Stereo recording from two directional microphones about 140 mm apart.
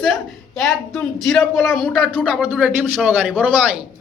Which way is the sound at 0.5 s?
Centre (ahead or behind).